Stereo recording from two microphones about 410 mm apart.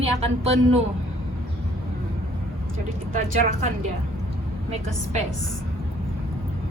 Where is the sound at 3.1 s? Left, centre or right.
Centre.